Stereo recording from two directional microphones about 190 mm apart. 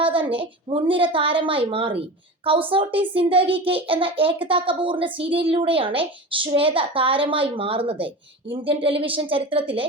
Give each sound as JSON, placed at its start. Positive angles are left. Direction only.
{"t": 0.0, "sound": "a woman's voice", "side_deg": -30}